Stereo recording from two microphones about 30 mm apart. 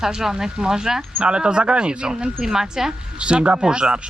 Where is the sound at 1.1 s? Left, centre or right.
Right.